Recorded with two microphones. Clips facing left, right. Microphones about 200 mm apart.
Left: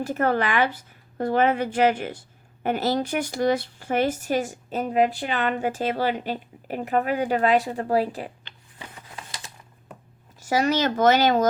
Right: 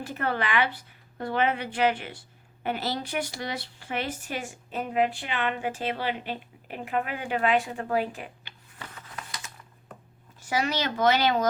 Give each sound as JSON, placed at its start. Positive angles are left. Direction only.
{"t": 0.0, "sound": "speech", "side_deg": 45}
{"t": 9.0, "sound": "a sound", "side_deg": 25}
{"t": 10.4, "sound": "speech", "side_deg": 40}